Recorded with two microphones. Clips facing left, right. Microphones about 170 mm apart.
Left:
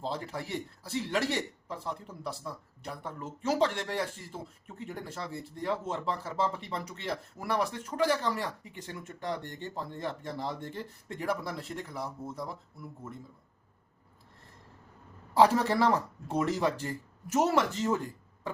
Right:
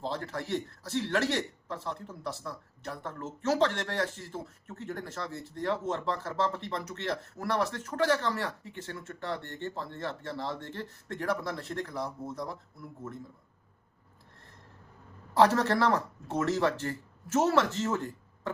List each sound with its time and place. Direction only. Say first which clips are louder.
0.0 s a man's voice: right 1 dB; 10° left (ahead or behind)
15.4 s a man's voice: even; 10° left (ahead or behind)